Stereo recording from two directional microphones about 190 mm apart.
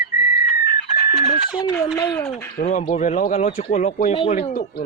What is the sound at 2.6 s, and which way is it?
Speech, 40° left (ahead or behind).